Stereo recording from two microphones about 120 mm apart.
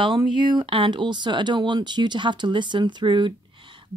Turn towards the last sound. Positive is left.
turn(degrees=-40)  # may be behind; listen again after turning